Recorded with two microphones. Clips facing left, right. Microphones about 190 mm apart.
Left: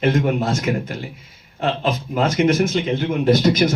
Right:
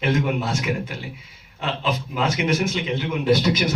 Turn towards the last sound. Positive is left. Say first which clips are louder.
# left 3 dB
turn(degrees=45)  # may be behind; listen again after turning